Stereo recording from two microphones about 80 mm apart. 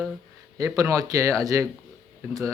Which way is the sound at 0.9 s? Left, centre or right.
Right.